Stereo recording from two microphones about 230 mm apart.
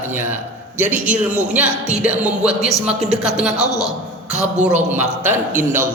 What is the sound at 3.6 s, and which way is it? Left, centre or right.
Speech, centre.